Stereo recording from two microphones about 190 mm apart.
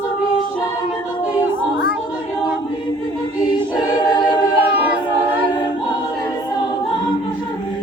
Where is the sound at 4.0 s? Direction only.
20° left (ahead or behind).